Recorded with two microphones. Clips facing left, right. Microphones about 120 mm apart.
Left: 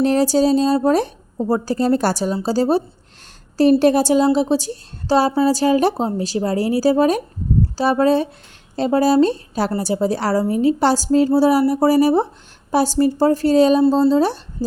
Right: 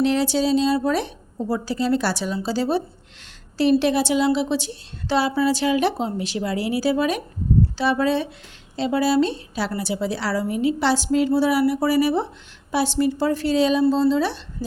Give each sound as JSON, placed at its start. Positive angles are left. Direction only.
{"t": 0.0, "sound": "a woman's voice", "side_deg": 45}